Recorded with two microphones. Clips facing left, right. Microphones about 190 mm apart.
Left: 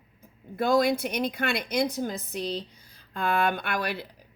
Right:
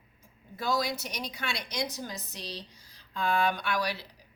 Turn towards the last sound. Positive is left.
turn(degrees=55)  # may be behind; listen again after turning